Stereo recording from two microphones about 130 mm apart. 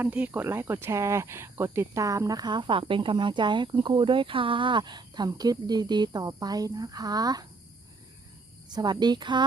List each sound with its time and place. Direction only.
0.0 s speech: 10° right (ahead or behind); by 7.4 s 30° right (ahead or behind)
8.7 s speech: 30° right (ahead or behind)